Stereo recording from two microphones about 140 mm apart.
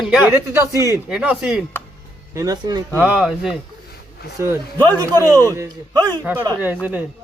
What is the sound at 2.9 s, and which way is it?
Speech, 10° right (ahead or behind).